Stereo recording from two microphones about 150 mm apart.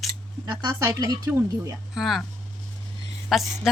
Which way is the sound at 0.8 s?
20° right (ahead or behind).